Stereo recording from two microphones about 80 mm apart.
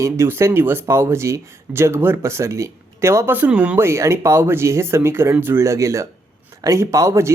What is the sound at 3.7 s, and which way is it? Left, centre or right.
Speech, right.